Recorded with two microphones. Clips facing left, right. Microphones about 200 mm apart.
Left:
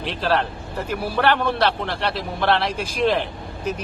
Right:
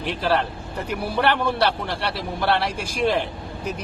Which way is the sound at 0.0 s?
15° right (ahead or behind).